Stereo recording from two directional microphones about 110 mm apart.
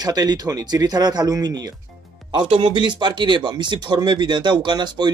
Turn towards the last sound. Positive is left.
turn(degrees=-40)  # may be behind; listen again after turning